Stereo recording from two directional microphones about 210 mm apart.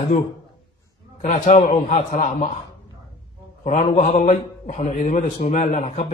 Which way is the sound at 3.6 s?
30° left (ahead or behind).